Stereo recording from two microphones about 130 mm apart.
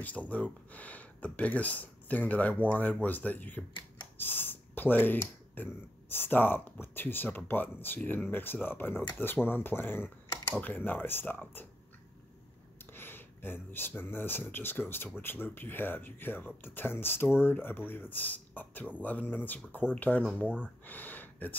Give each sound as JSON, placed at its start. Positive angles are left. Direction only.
{"t": 0.0, "sound": "speech", "side_deg": 10}
{"t": 12.9, "sound": "speech", "side_deg": 15}
{"t": 20.8, "sound": "a sound", "side_deg": 15}